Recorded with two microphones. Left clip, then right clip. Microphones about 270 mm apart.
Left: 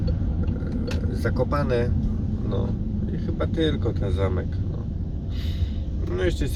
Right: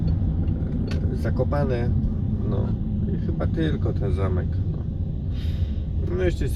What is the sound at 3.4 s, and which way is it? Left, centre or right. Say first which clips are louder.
Speech: left 4 dB; left.